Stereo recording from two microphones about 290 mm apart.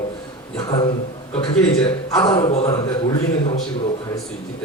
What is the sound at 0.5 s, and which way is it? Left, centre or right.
A man's voice, centre.